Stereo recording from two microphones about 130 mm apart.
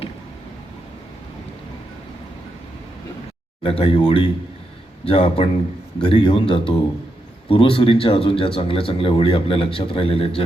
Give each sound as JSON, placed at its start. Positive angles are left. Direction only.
{"t": 3.6, "sound": "speech", "side_deg": 45}